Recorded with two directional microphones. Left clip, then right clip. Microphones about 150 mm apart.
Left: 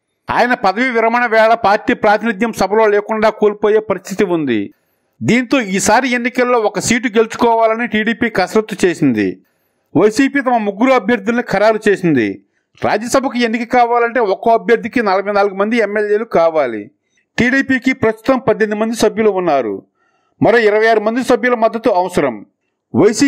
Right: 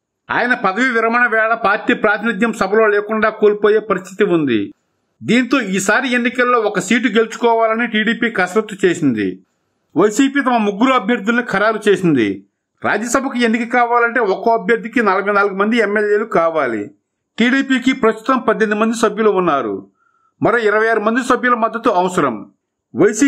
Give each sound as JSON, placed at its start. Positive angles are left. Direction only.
{"t": 0.3, "sound": "a man's voice", "side_deg": 45}